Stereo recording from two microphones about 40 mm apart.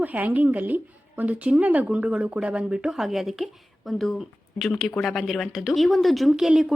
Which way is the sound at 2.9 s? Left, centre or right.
Centre.